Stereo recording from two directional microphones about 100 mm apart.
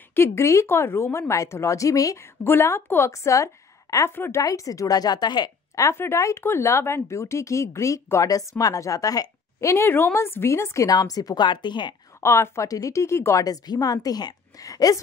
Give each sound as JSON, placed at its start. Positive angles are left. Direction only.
{"t": 0.1, "sound": "speech", "side_deg": 25}
{"t": 2.4, "sound": "speech", "side_deg": 25}
{"t": 5.9, "sound": "speech", "side_deg": 25}
{"t": 12.2, "sound": "a woman's voice", "side_deg": 30}